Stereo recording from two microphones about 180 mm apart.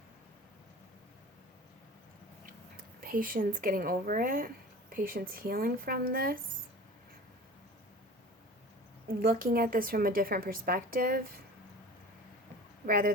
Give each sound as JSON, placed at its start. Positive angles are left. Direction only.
{"t": 2.5, "sound": "a woman's voice", "side_deg": -50}
{"t": 9.0, "sound": "a woman's voice", "side_deg": -55}
{"t": 12.8, "sound": "speech", "side_deg": -55}